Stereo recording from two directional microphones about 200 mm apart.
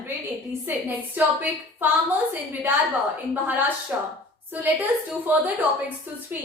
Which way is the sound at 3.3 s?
10° right (ahead or behind).